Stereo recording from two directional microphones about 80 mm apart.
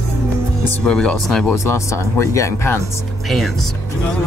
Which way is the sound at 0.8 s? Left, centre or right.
Centre.